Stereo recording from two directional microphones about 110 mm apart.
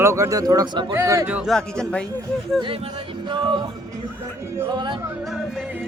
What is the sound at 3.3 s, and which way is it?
Music, 45° right (ahead or behind).